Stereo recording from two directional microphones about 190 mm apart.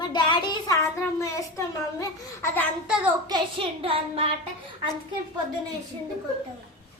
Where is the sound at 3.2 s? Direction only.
25° right (ahead or behind).